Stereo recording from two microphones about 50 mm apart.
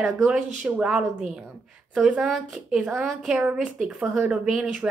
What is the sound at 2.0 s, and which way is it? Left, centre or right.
Speech, right.